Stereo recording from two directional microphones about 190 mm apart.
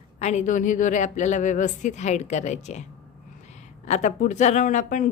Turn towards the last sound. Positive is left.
turn(degrees=40)  # may be behind; listen again after turning